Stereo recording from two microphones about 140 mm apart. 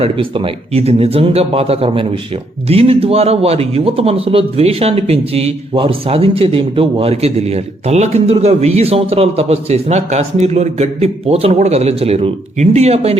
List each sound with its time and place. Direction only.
0.0 s speech: 40° right (ahead or behind)